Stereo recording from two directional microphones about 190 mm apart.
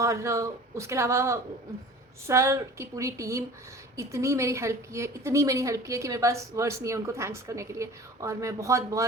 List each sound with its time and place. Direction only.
0.0 s a woman's voice: 15° right (ahead or behind)